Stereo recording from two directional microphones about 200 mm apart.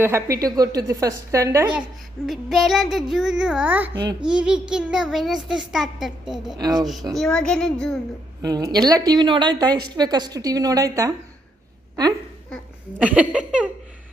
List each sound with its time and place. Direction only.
0.0 s a woman's voice: 15° right (ahead or behind)
3.9 s a woman's voice: 25° right (ahead or behind)
4.3 s a child's voice: 5° right (ahead or behind)
6.6 s a woman's voice: 20° right (ahead or behind)
6.8 s a child's voice: centre (ahead or behind)
8.4 s a woman's voice: 20° right (ahead or behind)
13.0 s a child's voice: 5° right (ahead or behind)